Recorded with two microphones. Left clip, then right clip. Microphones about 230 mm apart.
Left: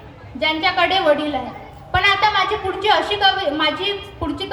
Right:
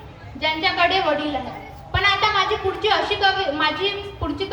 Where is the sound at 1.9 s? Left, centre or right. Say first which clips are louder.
Left 3 dB; left.